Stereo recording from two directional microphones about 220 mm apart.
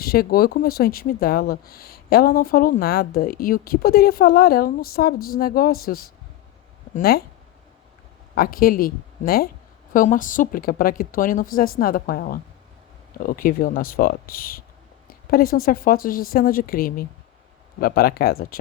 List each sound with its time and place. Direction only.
0.0 s speech: 45° left (ahead or behind)
8.4 s a woman's voice: 40° left (ahead or behind)